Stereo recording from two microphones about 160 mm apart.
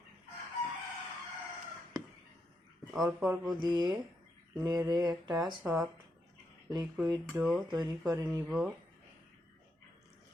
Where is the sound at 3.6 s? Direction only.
30° right (ahead or behind).